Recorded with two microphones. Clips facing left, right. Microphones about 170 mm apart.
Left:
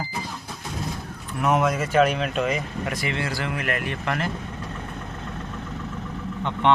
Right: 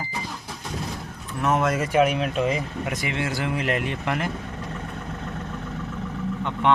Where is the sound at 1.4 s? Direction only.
15° left (ahead or behind).